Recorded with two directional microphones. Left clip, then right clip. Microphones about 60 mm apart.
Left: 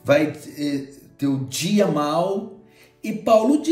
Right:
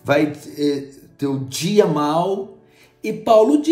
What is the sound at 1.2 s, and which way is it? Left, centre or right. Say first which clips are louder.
Music: right 1 dB; right.